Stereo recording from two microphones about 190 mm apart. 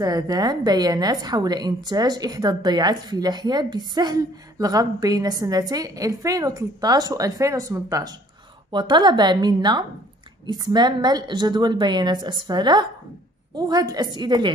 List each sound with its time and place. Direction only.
0.0 s a woman's voice: 20° right (ahead or behind)